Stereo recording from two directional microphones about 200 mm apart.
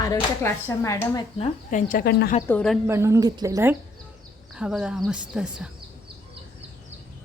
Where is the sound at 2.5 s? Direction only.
5° left (ahead or behind).